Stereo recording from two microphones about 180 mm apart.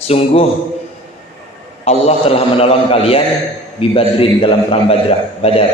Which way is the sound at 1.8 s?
35° left (ahead or behind).